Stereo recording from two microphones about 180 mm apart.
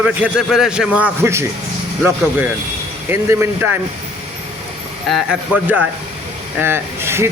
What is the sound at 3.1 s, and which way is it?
Speech, 15° right (ahead or behind).